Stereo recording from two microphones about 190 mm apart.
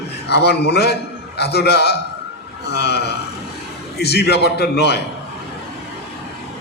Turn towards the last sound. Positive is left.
turn(degrees=60)  # may be behind; listen again after turning